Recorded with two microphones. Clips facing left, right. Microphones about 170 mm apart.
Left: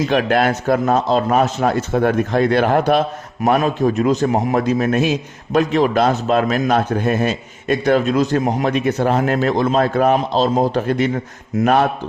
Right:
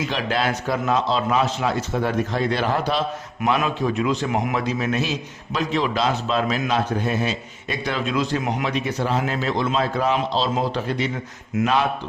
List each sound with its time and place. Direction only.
0.1 s a man's voice: 55° left (ahead or behind); by 4.6 s 35° left (ahead or behind)
4.6 s a man's voice: 50° left (ahead or behind)